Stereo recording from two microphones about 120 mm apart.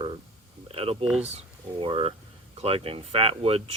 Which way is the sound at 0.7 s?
55° right (ahead or behind).